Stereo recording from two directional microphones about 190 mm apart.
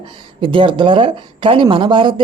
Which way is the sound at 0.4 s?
25° right (ahead or behind).